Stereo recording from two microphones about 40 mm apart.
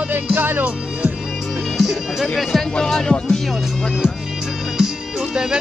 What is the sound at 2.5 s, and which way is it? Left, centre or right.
Speech, centre.